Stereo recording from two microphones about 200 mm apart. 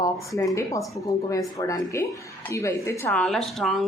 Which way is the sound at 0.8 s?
Centre (ahead or behind).